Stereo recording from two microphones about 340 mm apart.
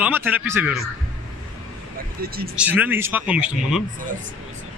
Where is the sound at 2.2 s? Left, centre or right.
Right.